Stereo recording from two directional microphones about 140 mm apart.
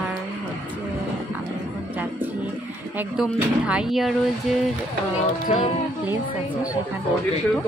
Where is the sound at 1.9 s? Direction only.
10° right (ahead or behind).